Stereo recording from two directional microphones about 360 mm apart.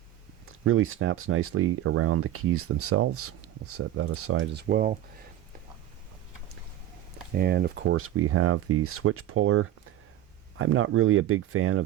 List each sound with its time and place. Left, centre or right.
0.4 s speech: right
7.3 s speech: right